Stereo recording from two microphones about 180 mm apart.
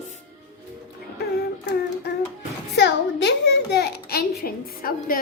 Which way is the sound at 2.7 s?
75° left (ahead or behind).